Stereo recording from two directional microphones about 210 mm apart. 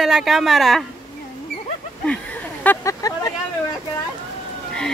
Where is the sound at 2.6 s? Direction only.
15° left (ahead or behind).